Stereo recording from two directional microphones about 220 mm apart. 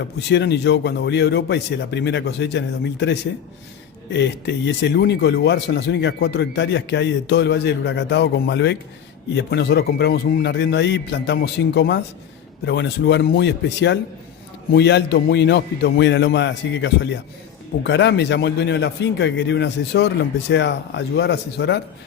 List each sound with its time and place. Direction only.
0.3 s speech: 50° left (ahead or behind)